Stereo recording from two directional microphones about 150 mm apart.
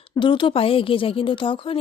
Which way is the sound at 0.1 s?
35° left (ahead or behind).